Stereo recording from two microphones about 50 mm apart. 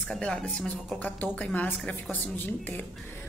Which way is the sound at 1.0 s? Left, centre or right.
Left.